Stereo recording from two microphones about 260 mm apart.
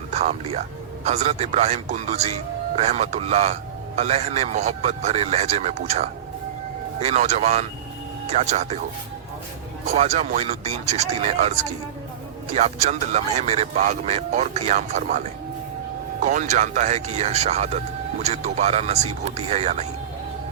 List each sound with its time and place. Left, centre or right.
0.1 s speech: right
9.8 s speech: right
16.2 s speech: right